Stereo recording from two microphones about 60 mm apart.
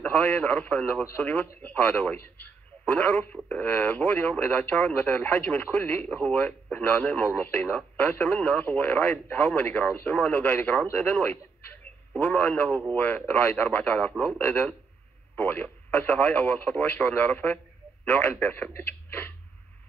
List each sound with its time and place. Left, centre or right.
0.0 s speech: left
14.4 s speech: left
18.8 s a sound: left